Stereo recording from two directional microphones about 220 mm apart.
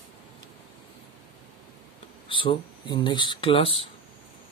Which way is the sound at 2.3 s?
20° left (ahead or behind).